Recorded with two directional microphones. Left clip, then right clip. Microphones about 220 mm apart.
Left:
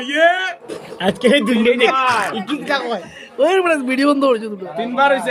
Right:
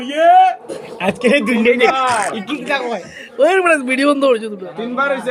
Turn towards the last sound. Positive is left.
turn(degrees=25)  # may be behind; listen again after turning